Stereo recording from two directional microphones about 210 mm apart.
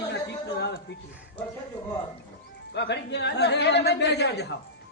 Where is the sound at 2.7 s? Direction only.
55° left (ahead or behind).